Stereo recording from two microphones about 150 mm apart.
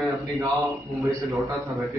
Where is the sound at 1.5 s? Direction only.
Centre (ahead or behind).